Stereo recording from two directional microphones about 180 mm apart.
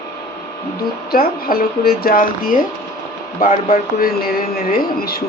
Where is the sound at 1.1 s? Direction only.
55° left (ahead or behind).